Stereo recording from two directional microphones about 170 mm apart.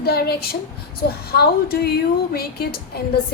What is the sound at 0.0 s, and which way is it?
Speech, 65° left (ahead or behind).